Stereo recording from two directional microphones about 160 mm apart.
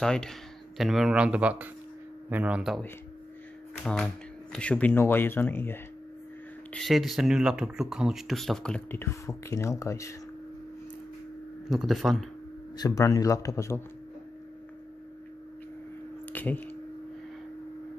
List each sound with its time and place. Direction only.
0.0 s speech: 5° left (ahead or behind)
3.8 s speech: 5° left (ahead or behind)
6.7 s speech: centre (ahead or behind); by 10.1 s 20° left (ahead or behind)
11.7 s speech: centre (ahead or behind)
12.7 s a man's voice: 20° left (ahead or behind)
16.3 s speech: 10° left (ahead or behind)